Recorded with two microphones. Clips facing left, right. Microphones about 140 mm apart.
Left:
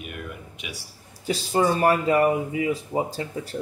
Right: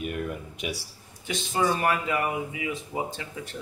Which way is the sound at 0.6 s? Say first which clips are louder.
Right 6 dB; 45° right (ahead or behind).